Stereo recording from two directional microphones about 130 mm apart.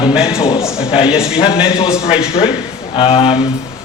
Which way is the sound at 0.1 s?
5° right (ahead or behind).